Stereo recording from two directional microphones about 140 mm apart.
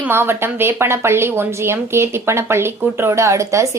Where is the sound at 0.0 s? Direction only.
15° right (ahead or behind).